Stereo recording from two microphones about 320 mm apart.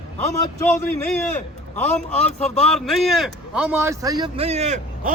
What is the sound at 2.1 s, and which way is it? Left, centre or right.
A man's voice, centre.